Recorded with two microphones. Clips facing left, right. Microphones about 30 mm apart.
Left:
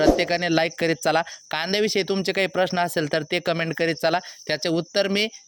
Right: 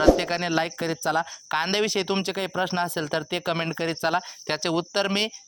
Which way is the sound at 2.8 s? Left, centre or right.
Left.